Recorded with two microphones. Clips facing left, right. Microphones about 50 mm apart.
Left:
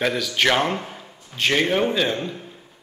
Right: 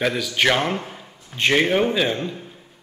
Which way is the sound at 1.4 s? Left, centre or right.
Centre.